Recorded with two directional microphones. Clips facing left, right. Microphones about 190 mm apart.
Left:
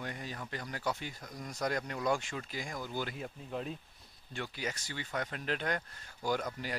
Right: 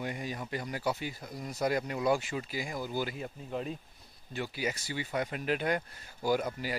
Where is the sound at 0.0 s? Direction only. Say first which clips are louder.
Right 5 dB; 10° right (ahead or behind).